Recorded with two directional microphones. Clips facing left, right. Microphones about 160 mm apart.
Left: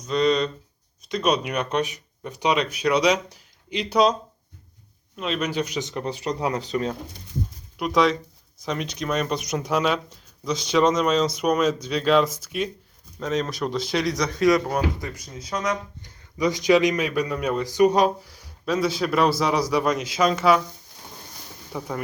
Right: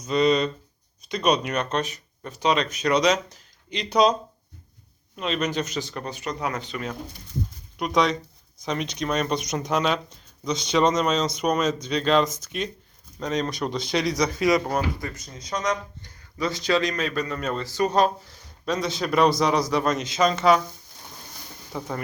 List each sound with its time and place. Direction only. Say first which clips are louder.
0.0 s a man's voice: even; 5° right (ahead or behind)
5.1 s speech: even; centre (ahead or behind); by 6.9 s 35° left (ahead or behind)
7.8 s speech: left 2 dB; centre (ahead or behind)
14.7 s a man's voice: left 1 dB; 10° left (ahead or behind)
21.7 s speech: left 1 dB; 5° left (ahead or behind)